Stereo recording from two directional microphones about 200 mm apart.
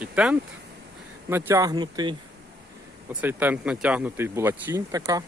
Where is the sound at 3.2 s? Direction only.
10° right (ahead or behind).